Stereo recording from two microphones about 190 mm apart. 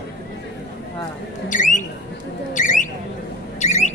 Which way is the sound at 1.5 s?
40° left (ahead or behind).